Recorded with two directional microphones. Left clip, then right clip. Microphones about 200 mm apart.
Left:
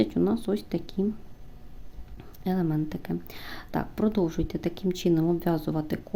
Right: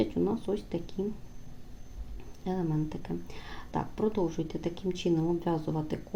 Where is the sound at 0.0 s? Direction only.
35° left (ahead or behind).